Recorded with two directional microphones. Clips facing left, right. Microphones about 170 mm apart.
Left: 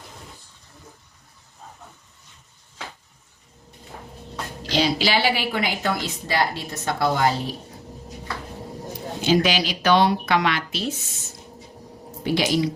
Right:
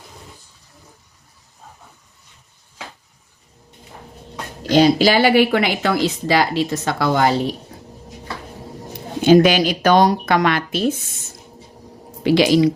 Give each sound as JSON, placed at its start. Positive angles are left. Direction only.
{"t": 4.7, "sound": "speech", "side_deg": -50}
{"t": 9.2, "sound": "speech", "side_deg": -50}
{"t": 12.2, "sound": "speech", "side_deg": -90}